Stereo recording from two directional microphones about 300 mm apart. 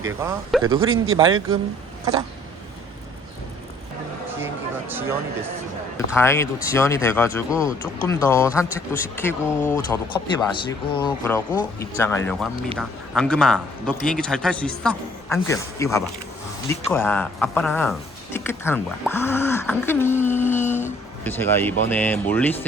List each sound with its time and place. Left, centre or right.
0.2 s speech: centre
0.8 s speech: right
1.1 s speech: centre
4.9 s speech: centre
6.1 s a man's voice: centre
19.1 s a sound: centre
21.2 s a man's voice: centre